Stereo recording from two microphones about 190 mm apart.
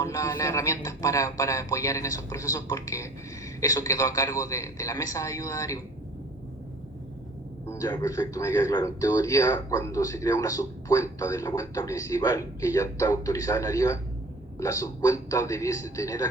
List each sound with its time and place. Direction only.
0.0 s a man's voice: 15° left (ahead or behind)
7.7 s a man's voice: 15° left (ahead or behind)